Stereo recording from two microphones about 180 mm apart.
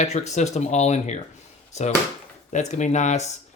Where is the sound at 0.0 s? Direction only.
40° left (ahead or behind).